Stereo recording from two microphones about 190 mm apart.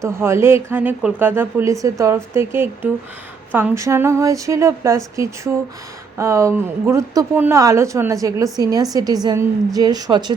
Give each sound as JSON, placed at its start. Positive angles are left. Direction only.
{"t": 0.0, "sound": "a woman's voice", "side_deg": -15}